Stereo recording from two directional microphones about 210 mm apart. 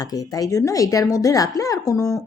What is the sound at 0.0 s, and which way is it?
Speech, 15° left (ahead or behind).